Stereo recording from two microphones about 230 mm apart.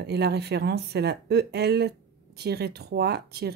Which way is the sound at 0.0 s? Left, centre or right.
Right.